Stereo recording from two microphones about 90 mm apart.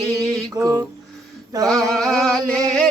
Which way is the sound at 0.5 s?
40° right (ahead or behind).